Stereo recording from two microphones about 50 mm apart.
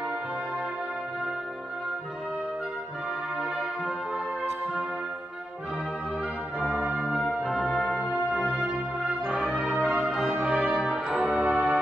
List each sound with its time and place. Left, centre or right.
4.1 s music: right
6.6 s organ: right
7.0 s music: centre
9.2 s music: centre
10.0 s brass instrument: centre
10.4 s brass instrument: right
10.8 s brass instrument: centre
11.1 s music: right